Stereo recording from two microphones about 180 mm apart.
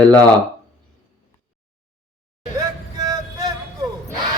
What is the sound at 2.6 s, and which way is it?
Music, 20° right (ahead or behind).